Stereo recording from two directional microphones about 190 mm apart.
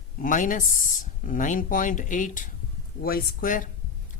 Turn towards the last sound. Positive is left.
turn(degrees=45)  # may be behind; listen again after turning